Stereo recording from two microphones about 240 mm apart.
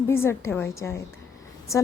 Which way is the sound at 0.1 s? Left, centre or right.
Centre.